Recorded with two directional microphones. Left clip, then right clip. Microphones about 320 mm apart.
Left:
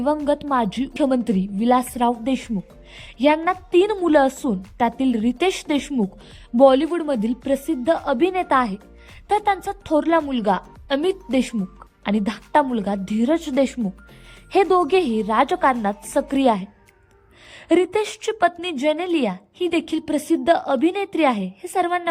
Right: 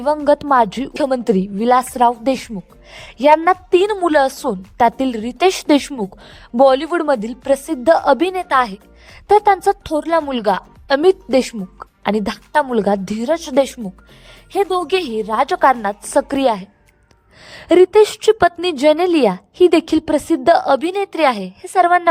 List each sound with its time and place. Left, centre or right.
0.5 s a woman's voice: centre
14.8 s a woman's voice: centre